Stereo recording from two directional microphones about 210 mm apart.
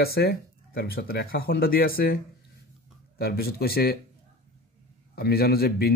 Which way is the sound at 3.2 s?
50° left (ahead or behind).